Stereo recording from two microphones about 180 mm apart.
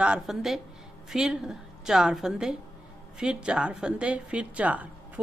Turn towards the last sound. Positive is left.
turn(degrees=-10)  # may be behind; listen again after turning